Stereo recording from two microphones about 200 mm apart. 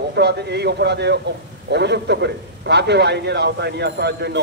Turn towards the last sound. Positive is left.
turn(degrees=-55)  # may be behind; listen again after turning